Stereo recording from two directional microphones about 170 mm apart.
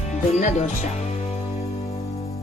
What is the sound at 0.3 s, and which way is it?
Music, 45° left (ahead or behind).